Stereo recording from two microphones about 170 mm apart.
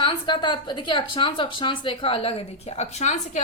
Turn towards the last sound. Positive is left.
turn(degrees=45)  # may be behind; listen again after turning